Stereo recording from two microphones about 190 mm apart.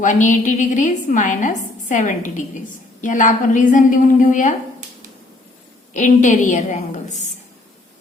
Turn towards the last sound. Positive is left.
turn(degrees=40)  # may be behind; listen again after turning